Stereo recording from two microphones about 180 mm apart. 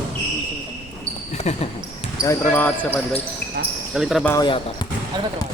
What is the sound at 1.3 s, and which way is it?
Speech, 35° left (ahead or behind).